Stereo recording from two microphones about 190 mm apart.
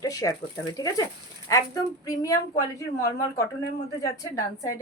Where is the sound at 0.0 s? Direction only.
20° left (ahead or behind).